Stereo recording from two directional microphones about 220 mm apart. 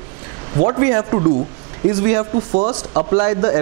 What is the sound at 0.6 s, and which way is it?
Speech, 20° right (ahead or behind).